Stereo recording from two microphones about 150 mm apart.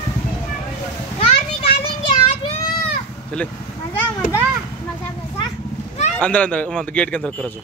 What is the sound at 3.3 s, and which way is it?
Speech, 5° left (ahead or behind).